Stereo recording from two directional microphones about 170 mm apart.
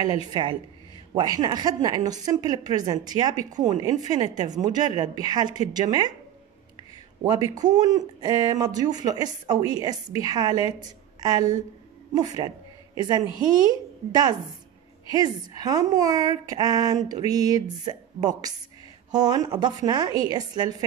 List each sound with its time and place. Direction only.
0.3 s a woman's voice: 25° right (ahead or behind)
7.2 s a woman's voice: 20° right (ahead or behind)
15.0 s a woman's voice: 20° right (ahead or behind)